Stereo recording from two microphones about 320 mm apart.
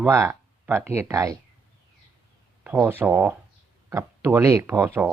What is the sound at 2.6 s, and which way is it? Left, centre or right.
Speech, centre.